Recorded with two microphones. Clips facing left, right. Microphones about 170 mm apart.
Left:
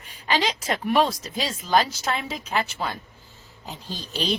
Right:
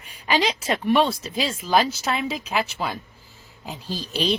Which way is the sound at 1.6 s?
5° right (ahead or behind).